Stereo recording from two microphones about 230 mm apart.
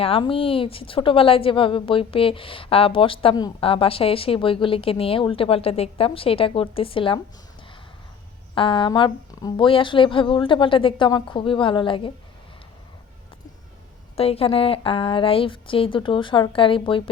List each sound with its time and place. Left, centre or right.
0.0 s a woman's voice: left
8.5 s a woman's voice: left
14.2 s a woman's voice: left